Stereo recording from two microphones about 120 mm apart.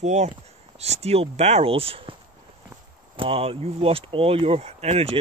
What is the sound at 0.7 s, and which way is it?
Speech, 65° right (ahead or behind).